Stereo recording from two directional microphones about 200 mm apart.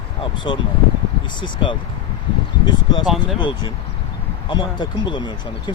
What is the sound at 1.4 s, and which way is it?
Speech, 25° left (ahead or behind).